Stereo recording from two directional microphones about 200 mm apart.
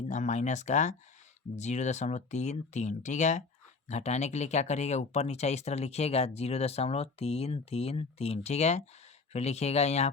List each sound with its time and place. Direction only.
0.1 s speech: 35° left (ahead or behind)